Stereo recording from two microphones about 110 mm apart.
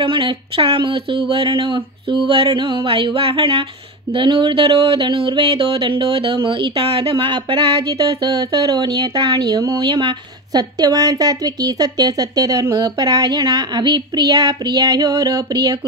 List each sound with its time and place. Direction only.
0.0 s speech: 50° right (ahead or behind)
8.1 s a woman's voice: 35° right (ahead or behind)
9.2 s speech: 50° right (ahead or behind)
9.5 s a woman's voice: 30° right (ahead or behind)
9.8 s a woman's voice: 50° right (ahead or behind)